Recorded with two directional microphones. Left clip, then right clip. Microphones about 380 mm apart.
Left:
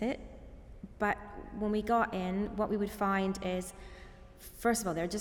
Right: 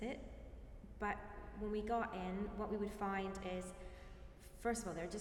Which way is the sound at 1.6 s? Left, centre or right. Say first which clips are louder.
Left 10 dB; left.